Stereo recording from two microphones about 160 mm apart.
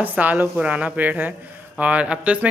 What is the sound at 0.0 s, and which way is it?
A woman's voice, 10° right (ahead or behind).